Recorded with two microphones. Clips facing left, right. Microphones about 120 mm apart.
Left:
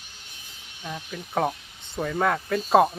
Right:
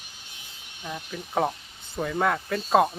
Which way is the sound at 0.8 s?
Centre (ahead or behind).